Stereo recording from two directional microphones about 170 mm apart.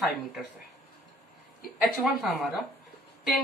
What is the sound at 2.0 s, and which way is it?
Speech, 5° right (ahead or behind).